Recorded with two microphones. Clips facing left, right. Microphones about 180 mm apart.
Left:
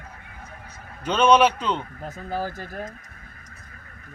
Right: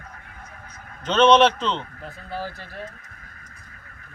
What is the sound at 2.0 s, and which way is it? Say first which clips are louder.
Speech: left 7 dB; 45° left (ahead or behind).